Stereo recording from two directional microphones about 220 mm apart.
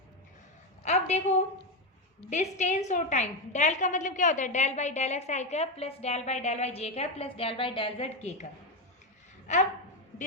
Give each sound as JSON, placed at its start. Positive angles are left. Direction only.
{"t": 0.9, "sound": "a woman's voice", "side_deg": 30}
{"t": 9.5, "sound": "a woman's voice", "side_deg": 30}